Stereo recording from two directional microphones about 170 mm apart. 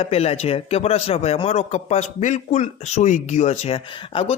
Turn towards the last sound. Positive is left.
turn(degrees=35)  # may be behind; listen again after turning